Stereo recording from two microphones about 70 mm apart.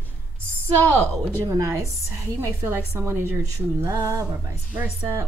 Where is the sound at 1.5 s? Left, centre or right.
Right.